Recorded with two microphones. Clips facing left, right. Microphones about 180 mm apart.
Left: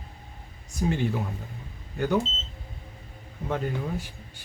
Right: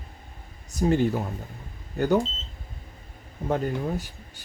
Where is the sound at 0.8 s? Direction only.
40° right (ahead or behind).